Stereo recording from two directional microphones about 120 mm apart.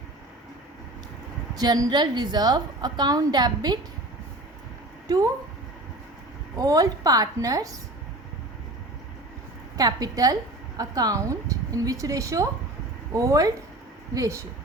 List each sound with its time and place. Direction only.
1.5 s a woman's voice: 35° right (ahead or behind)
5.0 s speech: 30° right (ahead or behind)
6.6 s a woman's voice: 30° right (ahead or behind)
9.7 s a woman's voice: 30° right (ahead or behind)